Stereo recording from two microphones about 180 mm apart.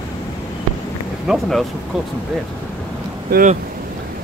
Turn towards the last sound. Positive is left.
turn(degrees=-50)  # may be behind; listen again after turning